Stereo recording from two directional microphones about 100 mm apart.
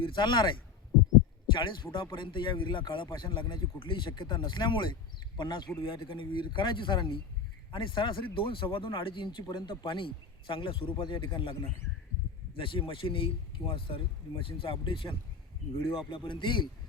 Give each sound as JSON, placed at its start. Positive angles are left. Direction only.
{"t": 0.0, "sound": "a man's voice", "side_deg": 55}
{"t": 1.5, "sound": "a man's voice", "side_deg": 55}